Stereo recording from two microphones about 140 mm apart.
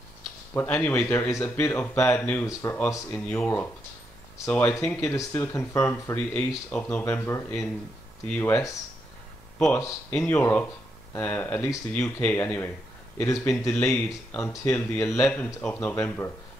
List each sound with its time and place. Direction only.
0.6 s speech: 15° left (ahead or behind)
3.1 s speech: 10° left (ahead or behind)
10.1 s speech: 15° left (ahead or behind)